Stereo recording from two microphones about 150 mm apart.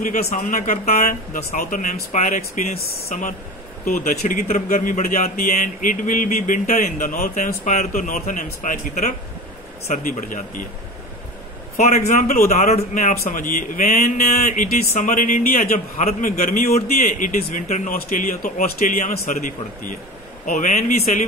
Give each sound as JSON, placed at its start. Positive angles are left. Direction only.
{"t": 0.0, "sound": "speech", "side_deg": 60}
{"t": 10.1, "sound": "speech", "side_deg": 60}
{"t": 11.9, "sound": "speech", "side_deg": 50}